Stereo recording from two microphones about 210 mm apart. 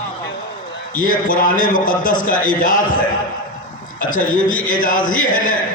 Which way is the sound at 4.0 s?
40° left (ahead or behind).